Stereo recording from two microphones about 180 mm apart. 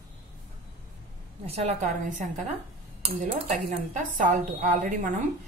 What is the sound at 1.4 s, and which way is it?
A woman's voice, 35° right (ahead or behind).